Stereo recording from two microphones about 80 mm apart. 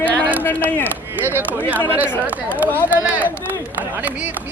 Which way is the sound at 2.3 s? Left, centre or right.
Centre.